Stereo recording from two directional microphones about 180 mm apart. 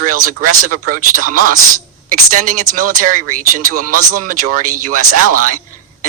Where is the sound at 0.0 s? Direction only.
50° right (ahead or behind).